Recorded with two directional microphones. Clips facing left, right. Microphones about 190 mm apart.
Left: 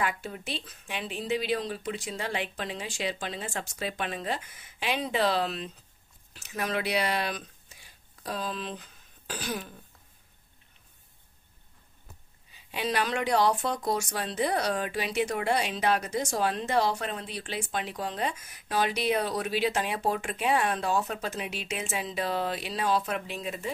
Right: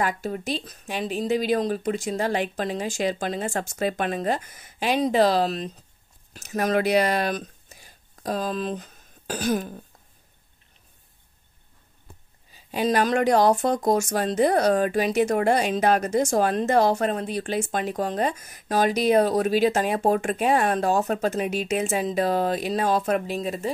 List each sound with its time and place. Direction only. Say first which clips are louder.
0.0 s speech: right 6 dB; 40° right (ahead or behind)
12.5 s speech: right 7 dB; 45° right (ahead or behind)